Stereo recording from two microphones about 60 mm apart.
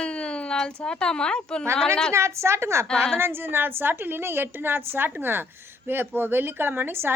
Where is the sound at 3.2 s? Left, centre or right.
Right.